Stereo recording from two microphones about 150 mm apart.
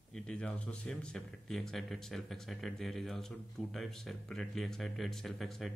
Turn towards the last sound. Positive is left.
turn(degrees=0)  # may be behind; listen again after turning